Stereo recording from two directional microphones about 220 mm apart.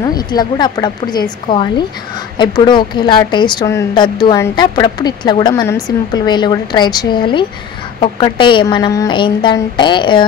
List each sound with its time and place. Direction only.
0.0 s a woman's voice: 20° left (ahead or behind)